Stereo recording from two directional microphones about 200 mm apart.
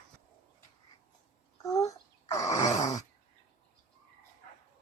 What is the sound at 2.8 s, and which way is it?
Groan, 20° left (ahead or behind).